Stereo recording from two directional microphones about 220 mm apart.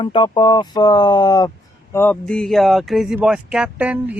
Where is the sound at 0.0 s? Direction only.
20° left (ahead or behind).